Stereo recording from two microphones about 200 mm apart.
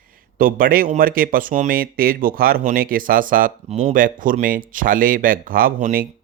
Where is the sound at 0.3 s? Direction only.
45° right (ahead or behind).